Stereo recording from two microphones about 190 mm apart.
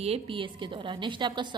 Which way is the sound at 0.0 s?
30° right (ahead or behind).